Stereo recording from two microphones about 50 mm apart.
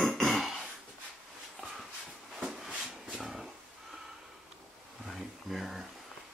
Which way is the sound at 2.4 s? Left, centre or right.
Centre.